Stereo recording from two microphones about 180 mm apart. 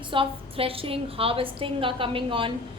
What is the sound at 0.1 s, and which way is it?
A woman's voice, 30° right (ahead or behind).